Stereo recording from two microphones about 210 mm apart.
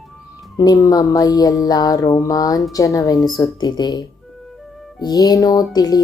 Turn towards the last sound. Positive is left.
turn(degrees=15)  # may be behind; listen again after turning